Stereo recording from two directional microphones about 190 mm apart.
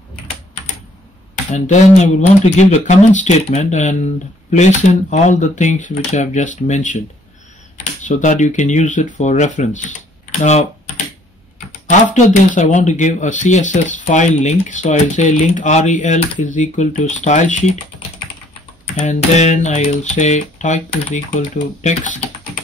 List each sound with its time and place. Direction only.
1.5 s speech: 35° left (ahead or behind)
8.0 s speech: 40° left (ahead or behind)
12.1 s speech: 40° left (ahead or behind)
18.9 s speech: 40° left (ahead or behind)